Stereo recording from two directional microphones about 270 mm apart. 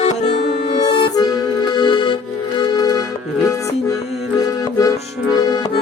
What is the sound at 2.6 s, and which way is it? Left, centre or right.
Music, centre.